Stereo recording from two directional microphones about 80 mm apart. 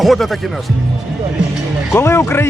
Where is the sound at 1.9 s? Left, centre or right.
Left.